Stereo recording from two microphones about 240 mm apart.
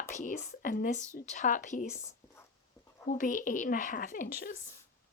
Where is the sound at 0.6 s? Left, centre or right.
Left.